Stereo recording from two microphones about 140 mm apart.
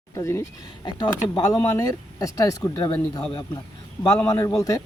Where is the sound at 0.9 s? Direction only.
30° left (ahead or behind).